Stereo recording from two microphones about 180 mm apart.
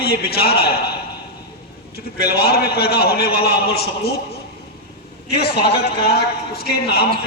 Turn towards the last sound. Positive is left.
turn(degrees=60)  # may be behind; listen again after turning